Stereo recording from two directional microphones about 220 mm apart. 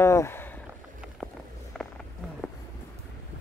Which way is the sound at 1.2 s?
Centre (ahead or behind).